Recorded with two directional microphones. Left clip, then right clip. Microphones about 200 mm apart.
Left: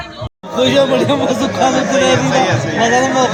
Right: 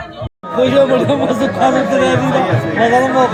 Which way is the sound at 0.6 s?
35° right (ahead or behind).